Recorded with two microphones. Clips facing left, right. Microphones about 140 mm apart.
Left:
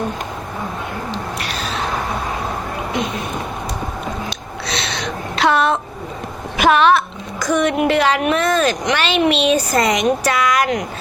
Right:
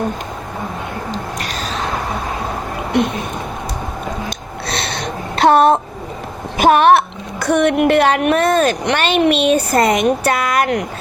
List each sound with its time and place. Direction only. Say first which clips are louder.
1.1 s cat: right 1 dB; 45° right (ahead or behind)
2.9 s speech: right 7 dB; 60° right (ahead or behind)
4.6 s a sound: right 1 dB; 55° right (ahead or behind)
6.6 s a woman's voice: right 3 dB; 50° right (ahead or behind)